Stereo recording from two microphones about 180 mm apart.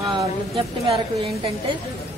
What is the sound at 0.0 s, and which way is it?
Speech, 25° right (ahead or behind).